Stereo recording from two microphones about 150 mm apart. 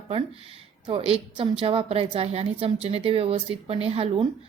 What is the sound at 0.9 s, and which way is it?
A woman's voice, 40° right (ahead or behind).